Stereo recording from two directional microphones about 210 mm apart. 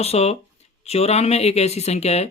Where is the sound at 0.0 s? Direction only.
30° left (ahead or behind).